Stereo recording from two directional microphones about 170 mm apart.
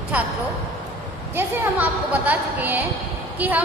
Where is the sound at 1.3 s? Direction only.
10° right (ahead or behind).